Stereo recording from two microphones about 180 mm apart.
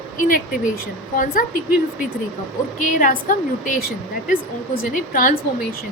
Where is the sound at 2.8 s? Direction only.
50° left (ahead or behind).